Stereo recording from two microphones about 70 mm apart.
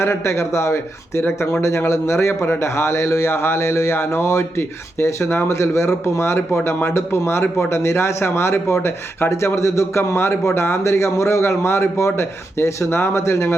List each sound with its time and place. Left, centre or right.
0.0 s a man's voice: left